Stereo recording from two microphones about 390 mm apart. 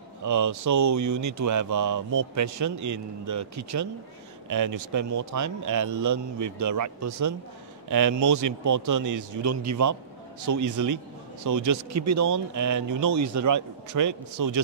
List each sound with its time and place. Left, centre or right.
0.2 s speech: right